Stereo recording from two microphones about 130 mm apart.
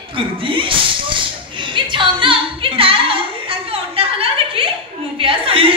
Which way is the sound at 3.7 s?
45° right (ahead or behind).